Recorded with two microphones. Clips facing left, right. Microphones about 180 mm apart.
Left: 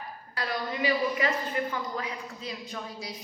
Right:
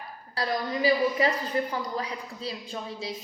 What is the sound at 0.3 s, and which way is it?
A woman's voice, 35° right (ahead or behind).